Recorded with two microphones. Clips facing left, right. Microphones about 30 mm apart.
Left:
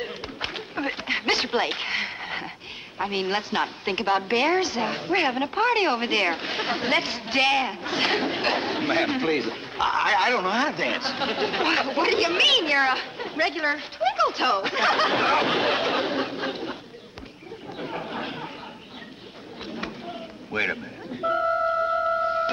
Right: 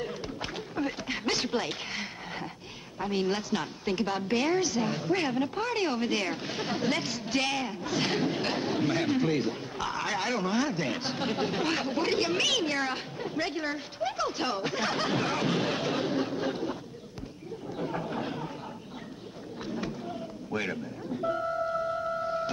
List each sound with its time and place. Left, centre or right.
0.0 s a sound: left
3.0 s a woman's voice: left
17.7 s chatter: left
19.7 s music: left